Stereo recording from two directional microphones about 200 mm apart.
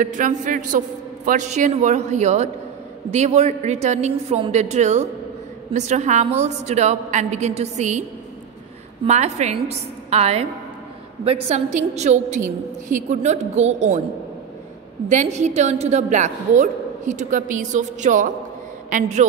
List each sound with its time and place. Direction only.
0.0 s a woman's voice: 40° right (ahead or behind)
9.0 s a woman's voice: 35° right (ahead or behind)
15.0 s a woman's voice: 35° right (ahead or behind)